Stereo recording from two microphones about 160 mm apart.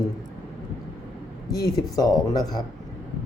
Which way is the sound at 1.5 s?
25° left (ahead or behind).